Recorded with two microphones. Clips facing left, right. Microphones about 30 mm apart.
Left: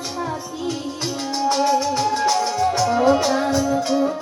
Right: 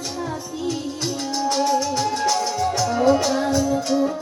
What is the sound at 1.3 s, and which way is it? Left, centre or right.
Music, centre.